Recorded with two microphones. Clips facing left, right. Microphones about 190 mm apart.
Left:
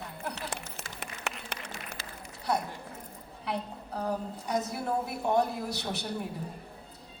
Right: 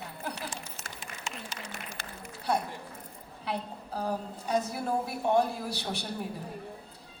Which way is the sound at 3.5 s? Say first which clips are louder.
Even; 30° right (ahead or behind).